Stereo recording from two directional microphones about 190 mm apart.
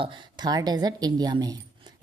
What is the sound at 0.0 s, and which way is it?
A woman's voice, 25° right (ahead or behind).